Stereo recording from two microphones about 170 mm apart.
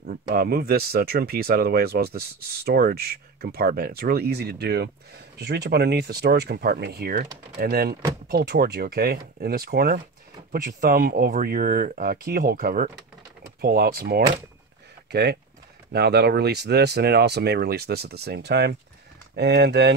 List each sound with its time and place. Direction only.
0.0 s speech: 65° right (ahead or behind)
15.0 s speech: 75° right (ahead or behind)